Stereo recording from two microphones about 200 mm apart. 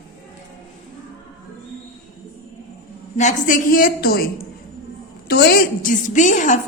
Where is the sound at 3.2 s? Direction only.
40° left (ahead or behind).